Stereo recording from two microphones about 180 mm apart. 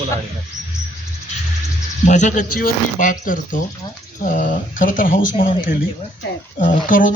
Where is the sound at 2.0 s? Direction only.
40° left (ahead or behind).